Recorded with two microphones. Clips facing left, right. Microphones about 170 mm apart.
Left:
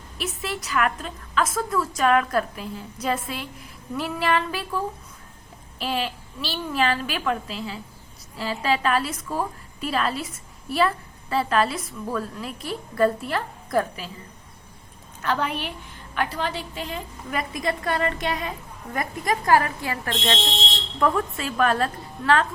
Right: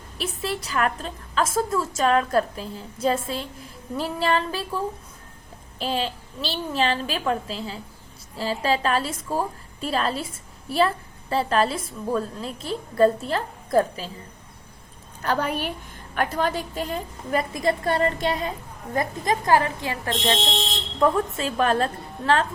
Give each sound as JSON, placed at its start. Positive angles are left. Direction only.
{"t": 0.2, "sound": "a woman's voice", "side_deg": -30}
{"t": 5.8, "sound": "a woman's voice", "side_deg": -30}
{"t": 15.2, "sound": "a woman's voice", "side_deg": -40}
{"t": 17.5, "sound": "a woman's voice", "side_deg": -30}